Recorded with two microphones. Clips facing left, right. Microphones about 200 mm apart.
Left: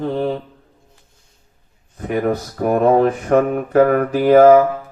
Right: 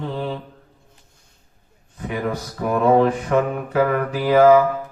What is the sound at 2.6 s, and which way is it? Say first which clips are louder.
Speech: left 2 dB; 50° left (ahead or behind).